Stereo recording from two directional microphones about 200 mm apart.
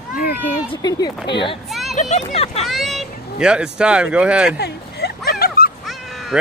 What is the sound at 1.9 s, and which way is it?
Speech, 35° left (ahead or behind).